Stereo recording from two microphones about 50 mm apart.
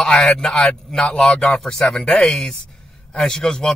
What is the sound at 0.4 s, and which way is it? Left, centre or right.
Speech, centre.